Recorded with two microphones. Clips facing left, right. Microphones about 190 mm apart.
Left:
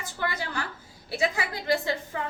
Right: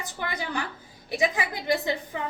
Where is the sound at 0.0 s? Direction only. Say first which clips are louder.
Left 1 dB; 20° right (ahead or behind).